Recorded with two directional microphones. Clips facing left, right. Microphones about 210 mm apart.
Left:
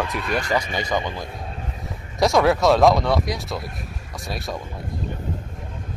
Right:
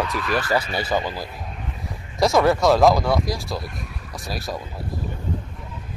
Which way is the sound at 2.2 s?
Centre (ahead or behind).